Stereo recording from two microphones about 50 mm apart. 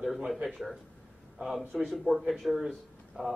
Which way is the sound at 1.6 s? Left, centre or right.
Right.